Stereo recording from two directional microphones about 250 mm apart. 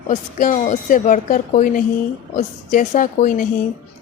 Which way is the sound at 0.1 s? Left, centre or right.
Left.